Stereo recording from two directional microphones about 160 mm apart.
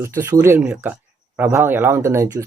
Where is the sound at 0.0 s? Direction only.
15° right (ahead or behind).